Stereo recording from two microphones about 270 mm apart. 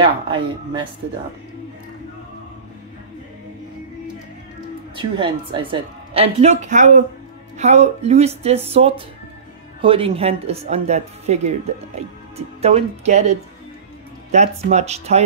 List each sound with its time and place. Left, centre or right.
0.0 s speech: centre
4.9 s a woman's voice: centre